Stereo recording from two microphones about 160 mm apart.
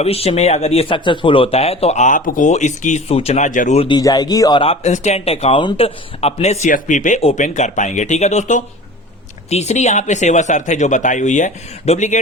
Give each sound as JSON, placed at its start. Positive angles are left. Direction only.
{"t": 0.0, "sound": "speech", "side_deg": 40}
{"t": 3.8, "sound": "speech", "side_deg": 25}